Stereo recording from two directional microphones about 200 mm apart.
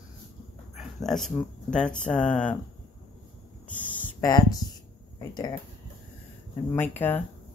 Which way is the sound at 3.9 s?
10° left (ahead or behind).